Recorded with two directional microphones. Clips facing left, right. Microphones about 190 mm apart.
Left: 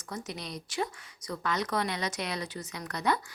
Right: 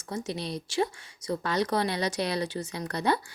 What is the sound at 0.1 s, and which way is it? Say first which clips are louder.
Speech: right 6 dB; 25° right (ahead or behind).